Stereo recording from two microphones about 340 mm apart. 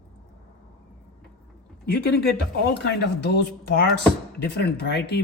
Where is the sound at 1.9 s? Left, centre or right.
Left.